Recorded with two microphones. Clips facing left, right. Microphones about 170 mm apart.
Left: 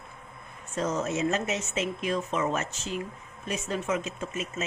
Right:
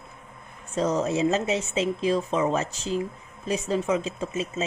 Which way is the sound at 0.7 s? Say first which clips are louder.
Right 5 dB; 35° right (ahead or behind).